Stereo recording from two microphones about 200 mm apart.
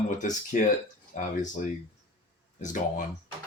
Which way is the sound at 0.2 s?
40° left (ahead or behind).